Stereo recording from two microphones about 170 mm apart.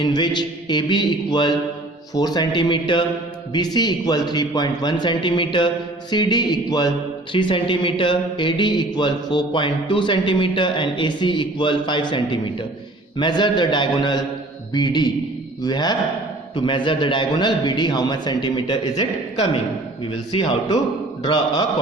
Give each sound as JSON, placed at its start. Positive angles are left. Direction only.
{"t": 0.0, "sound": "speech", "side_deg": 25}